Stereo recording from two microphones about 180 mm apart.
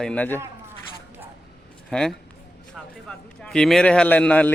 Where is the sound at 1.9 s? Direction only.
5° left (ahead or behind).